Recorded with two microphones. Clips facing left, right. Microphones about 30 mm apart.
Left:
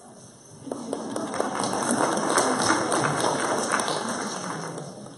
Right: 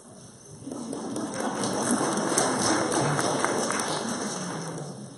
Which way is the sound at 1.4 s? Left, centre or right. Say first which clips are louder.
Left 3 dB; left.